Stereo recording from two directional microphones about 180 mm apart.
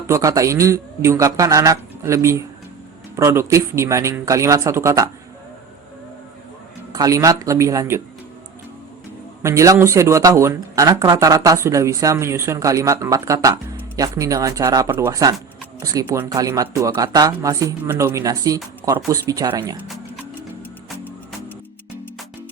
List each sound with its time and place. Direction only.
0.1 s speech: 20° right (ahead or behind)
6.9 s speech: 20° right (ahead or behind)
9.4 s speech: 15° right (ahead or behind)